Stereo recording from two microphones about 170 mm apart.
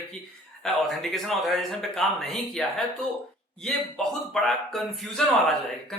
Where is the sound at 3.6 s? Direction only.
5° left (ahead or behind).